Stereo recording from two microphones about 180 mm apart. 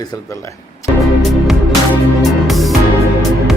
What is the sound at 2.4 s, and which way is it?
Music, centre (ahead or behind).